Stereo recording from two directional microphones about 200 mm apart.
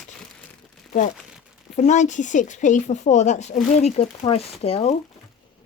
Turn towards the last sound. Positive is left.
turn(degrees=30)  # may be behind; listen again after turning